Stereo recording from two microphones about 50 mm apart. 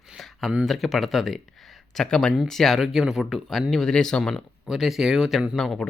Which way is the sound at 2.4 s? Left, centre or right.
Centre.